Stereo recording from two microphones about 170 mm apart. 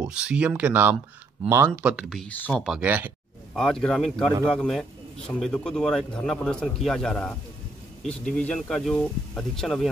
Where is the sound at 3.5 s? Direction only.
5° left (ahead or behind).